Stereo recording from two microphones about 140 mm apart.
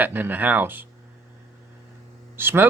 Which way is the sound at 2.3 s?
15° right (ahead or behind).